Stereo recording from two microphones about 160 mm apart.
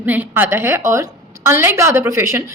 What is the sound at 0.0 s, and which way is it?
A woman's voice, 10° right (ahead or behind).